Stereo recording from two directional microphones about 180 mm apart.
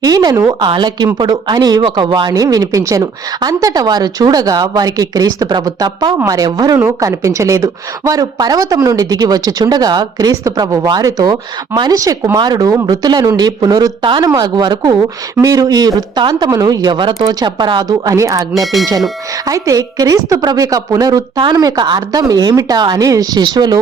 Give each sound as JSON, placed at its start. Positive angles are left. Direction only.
{"t": 0.0, "sound": "speech", "side_deg": -20}
{"t": 18.5, "sound": "speech", "side_deg": 0}
{"t": 19.5, "sound": "speech", "side_deg": -20}